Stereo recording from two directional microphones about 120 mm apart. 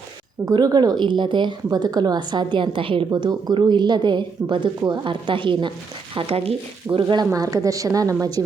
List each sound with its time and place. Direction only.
0.4 s a woman's voice: 35° right (ahead or behind)
3.1 s a woman's voice: 35° right (ahead or behind)
6.1 s frying: 55° right (ahead or behind)
6.9 s a woman's voice: 40° right (ahead or behind)
7.3 s a woman's voice: 30° right (ahead or behind)